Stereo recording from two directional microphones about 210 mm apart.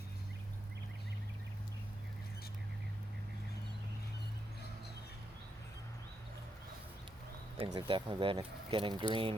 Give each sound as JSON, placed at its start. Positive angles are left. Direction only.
{"t": 7.6, "sound": "speech", "side_deg": -25}